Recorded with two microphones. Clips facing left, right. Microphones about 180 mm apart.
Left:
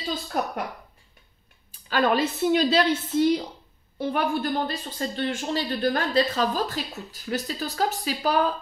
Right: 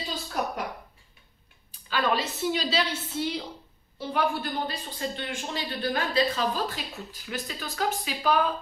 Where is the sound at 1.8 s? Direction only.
50° left (ahead or behind).